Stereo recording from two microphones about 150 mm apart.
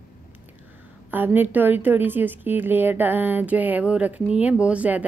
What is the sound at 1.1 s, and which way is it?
A woman's voice, 15° right (ahead or behind).